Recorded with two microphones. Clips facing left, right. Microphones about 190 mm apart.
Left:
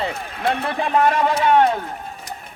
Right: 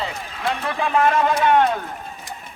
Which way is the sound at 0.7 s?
40° left (ahead or behind).